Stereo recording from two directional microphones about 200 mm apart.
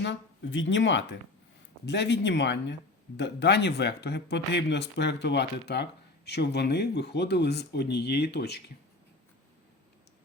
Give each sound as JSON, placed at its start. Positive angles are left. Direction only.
{"t": 0.0, "sound": "speech", "side_deg": 65}